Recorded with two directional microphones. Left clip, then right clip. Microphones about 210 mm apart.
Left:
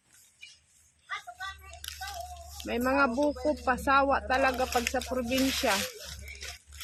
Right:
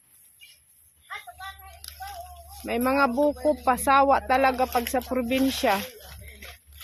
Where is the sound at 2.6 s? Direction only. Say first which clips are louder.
Right 4 dB; 25° right (ahead or behind).